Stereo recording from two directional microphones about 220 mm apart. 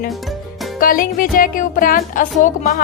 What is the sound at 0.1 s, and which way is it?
Music, centre (ahead or behind).